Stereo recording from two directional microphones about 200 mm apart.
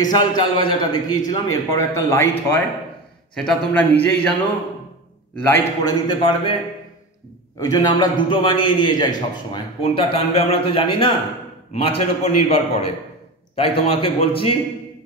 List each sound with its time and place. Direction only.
0.0 s a man's voice: 20° left (ahead or behind)
5.3 s a man's voice: 10° left (ahead or behind)
7.5 s a man's voice: 20° left (ahead or behind)